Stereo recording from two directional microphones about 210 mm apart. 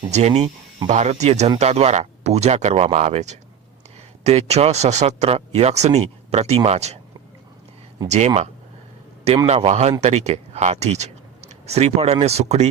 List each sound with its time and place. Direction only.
0.1 s speech: 30° right (ahead or behind)
8.0 s speech: 35° right (ahead or behind)
9.5 s speech: 30° right (ahead or behind)